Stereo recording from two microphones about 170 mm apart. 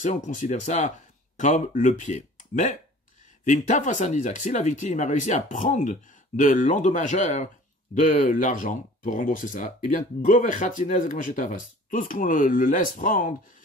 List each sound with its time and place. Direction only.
0.0 s speech: 45° left (ahead or behind)